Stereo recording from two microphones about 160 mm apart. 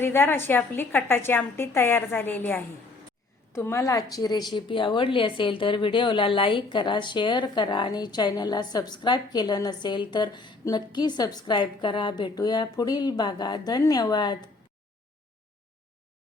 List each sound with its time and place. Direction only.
0.0 s a woman's voice: 15° left (ahead or behind)